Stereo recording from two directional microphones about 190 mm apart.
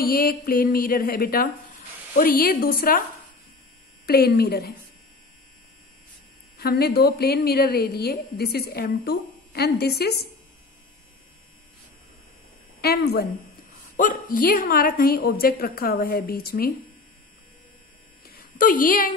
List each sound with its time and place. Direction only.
0.0 s a woman's voice: 50° left (ahead or behind)
4.0 s a woman's voice: 55° left (ahead or behind)
6.6 s a woman's voice: 55° left (ahead or behind)
12.8 s a woman's voice: 55° left (ahead or behind)
13.9 s a woman's voice: 45° left (ahead or behind)
18.2 s a sound: 50° left (ahead or behind)